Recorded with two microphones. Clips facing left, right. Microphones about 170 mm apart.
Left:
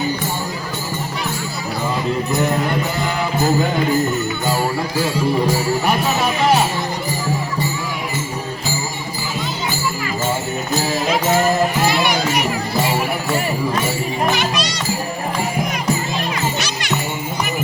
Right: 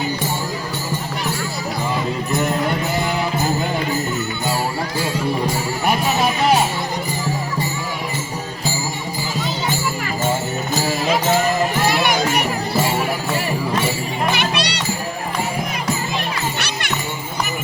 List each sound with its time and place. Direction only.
14.3 s music: 65° right (ahead or behind)
16.6 s music: 60° right (ahead or behind)